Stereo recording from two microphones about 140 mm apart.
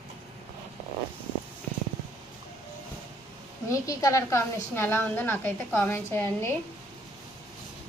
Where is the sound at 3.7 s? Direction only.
25° left (ahead or behind).